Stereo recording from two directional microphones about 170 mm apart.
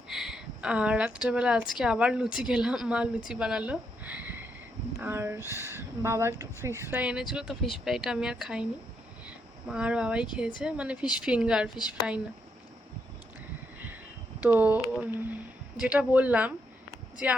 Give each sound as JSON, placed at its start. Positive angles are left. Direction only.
{"t": 0.1, "sound": "speech", "side_deg": 0}
{"t": 9.2, "sound": "a sound", "side_deg": -5}
{"t": 10.3, "sound": "speech", "side_deg": -5}
{"t": 14.4, "sound": "speech", "side_deg": -10}